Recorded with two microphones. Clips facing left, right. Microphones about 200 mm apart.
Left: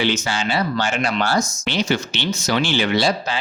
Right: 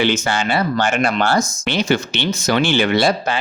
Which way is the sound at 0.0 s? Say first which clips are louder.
Right 3 dB; 55° right (ahead or behind).